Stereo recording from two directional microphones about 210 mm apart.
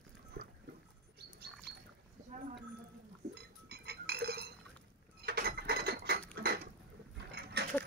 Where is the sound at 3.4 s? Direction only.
50° right (ahead or behind).